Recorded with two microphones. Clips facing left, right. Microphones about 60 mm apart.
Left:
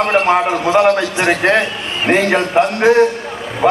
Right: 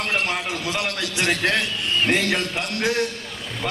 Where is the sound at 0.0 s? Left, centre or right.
Left.